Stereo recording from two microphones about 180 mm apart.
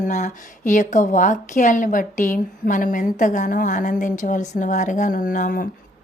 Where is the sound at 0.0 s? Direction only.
40° left (ahead or behind).